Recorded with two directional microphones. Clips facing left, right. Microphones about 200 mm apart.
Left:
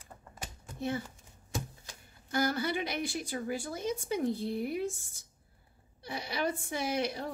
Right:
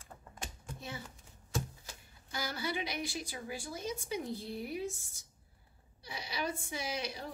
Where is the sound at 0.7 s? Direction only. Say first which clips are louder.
Left 12 dB; 55° left (ahead or behind).